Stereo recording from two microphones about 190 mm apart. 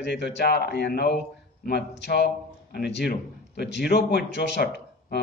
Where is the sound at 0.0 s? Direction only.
65° left (ahead or behind).